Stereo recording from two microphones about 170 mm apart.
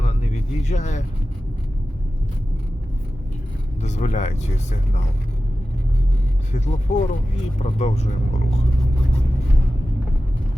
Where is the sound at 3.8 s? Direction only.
45° left (ahead or behind).